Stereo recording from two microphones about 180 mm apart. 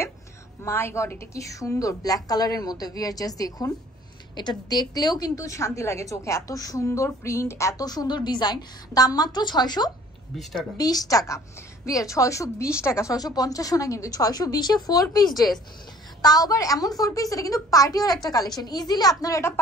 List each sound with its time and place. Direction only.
0.7 s a woman's voice: 15° left (ahead or behind)
10.3 s speech: centre (ahead or behind)
10.8 s a woman's voice: 20° left (ahead or behind)